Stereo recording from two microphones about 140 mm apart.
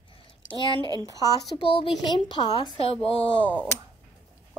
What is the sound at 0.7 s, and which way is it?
Speech, 30° right (ahead or behind).